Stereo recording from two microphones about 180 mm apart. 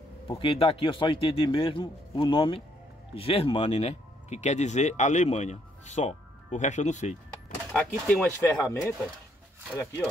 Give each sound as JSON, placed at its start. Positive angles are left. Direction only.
{"t": 0.4, "sound": "speech", "side_deg": 30}
{"t": 7.7, "sound": "speech", "side_deg": 5}
{"t": 8.5, "sound": "speech", "side_deg": 15}